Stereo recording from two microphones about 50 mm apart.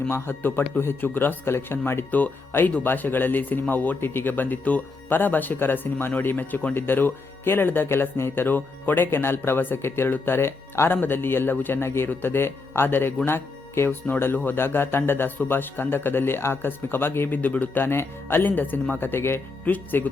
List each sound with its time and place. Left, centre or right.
0.3 s speech: left
1.5 s speech: left
2.0 s speech: left
17.3 s speech: left
17.8 s speech: left
19.6 s speech: left